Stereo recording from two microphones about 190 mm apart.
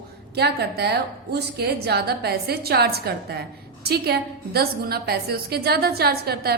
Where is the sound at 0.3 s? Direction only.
60° right (ahead or behind).